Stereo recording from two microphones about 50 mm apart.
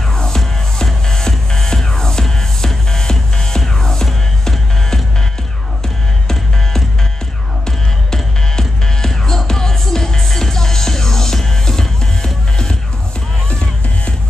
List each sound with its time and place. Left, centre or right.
0.1 s music: centre
7.6 s music: centre